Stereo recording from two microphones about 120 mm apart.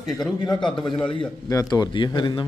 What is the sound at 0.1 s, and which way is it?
A man's voice, 35° left (ahead or behind).